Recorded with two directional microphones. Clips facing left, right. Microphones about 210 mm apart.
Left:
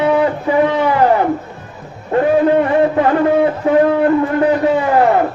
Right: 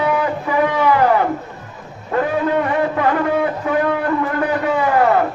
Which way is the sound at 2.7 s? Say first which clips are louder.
Left 5 dB; 30° left (ahead or behind).